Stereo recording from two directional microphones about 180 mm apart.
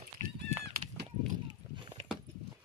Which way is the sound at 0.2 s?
35° right (ahead or behind).